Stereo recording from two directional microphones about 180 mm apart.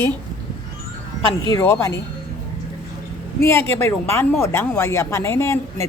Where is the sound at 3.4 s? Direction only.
15° left (ahead or behind).